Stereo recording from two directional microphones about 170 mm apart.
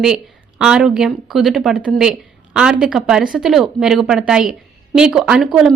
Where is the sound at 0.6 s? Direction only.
5° right (ahead or behind).